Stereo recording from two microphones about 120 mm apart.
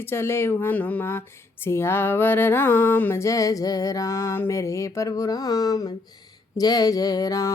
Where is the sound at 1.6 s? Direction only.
20° left (ahead or behind).